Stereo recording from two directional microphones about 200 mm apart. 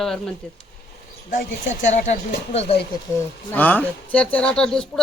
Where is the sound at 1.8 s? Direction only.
35° left (ahead or behind).